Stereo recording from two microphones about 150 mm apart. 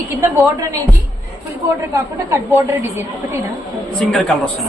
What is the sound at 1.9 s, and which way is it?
Speech, 20° right (ahead or behind).